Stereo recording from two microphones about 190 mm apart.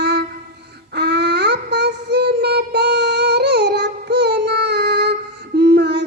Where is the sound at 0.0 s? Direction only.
60° right (ahead or behind).